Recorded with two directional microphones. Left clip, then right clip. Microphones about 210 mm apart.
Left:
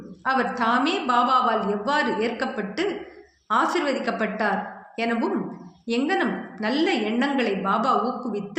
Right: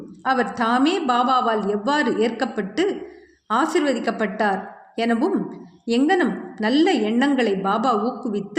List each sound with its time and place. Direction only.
0.3 s a woman's voice: 50° right (ahead or behind)